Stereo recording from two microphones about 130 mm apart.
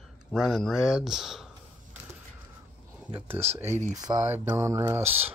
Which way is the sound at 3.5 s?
20° right (ahead or behind).